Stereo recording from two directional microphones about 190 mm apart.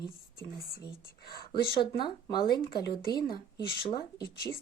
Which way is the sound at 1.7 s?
25° left (ahead or behind).